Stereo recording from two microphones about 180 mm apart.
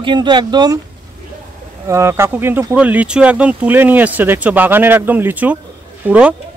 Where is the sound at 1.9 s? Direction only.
15° right (ahead or behind).